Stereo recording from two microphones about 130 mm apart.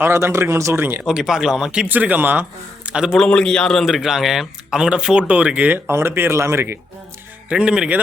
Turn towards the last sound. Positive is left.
turn(degrees=-5)  # may be behind; listen again after turning